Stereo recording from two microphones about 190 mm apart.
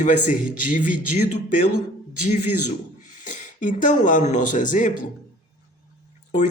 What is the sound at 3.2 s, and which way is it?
Speech, 40° left (ahead or behind).